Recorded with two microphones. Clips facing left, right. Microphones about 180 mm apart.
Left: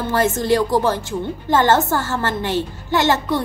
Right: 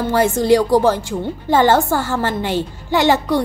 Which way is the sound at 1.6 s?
15° right (ahead or behind).